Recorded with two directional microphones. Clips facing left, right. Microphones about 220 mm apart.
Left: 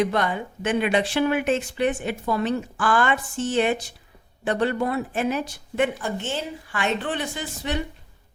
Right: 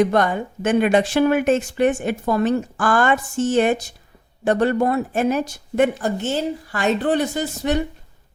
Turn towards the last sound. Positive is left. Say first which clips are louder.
# right 7 dB
turn(degrees=-45)  # may be behind; listen again after turning